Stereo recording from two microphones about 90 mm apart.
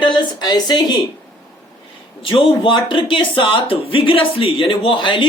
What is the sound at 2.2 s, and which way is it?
Speech, 70° left (ahead or behind).